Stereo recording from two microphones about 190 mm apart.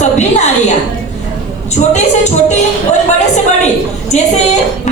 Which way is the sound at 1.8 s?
40° left (ahead or behind).